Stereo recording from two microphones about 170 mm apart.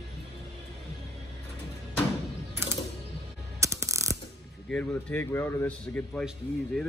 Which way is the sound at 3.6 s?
15° right (ahead or behind).